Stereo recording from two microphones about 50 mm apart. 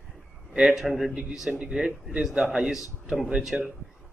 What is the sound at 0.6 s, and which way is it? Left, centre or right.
A man's voice, centre.